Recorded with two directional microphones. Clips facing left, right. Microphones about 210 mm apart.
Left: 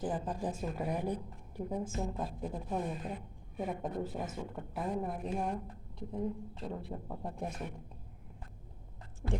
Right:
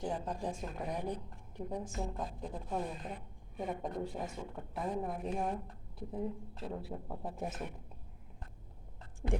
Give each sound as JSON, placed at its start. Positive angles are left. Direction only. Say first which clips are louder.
{"t": 0.0, "sound": "a woman's voice", "louder": "left 2 dB", "side_deg": 5}
{"t": 9.2, "sound": "speech", "louder": "right 1 dB", "side_deg": -20}